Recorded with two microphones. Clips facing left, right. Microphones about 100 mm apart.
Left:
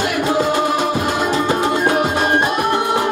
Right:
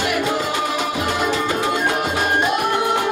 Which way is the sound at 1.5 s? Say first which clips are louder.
Left 4 dB; 40° left (ahead or behind).